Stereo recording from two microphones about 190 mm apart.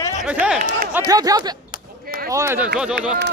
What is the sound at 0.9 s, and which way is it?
A man's voice, 20° right (ahead or behind).